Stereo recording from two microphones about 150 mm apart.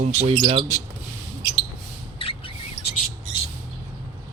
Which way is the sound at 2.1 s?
35° left (ahead or behind).